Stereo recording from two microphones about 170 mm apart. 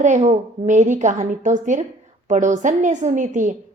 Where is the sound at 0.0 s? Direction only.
45° right (ahead or behind).